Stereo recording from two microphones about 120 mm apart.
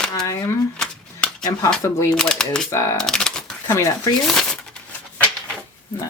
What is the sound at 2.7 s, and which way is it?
Speech, 25° left (ahead or behind).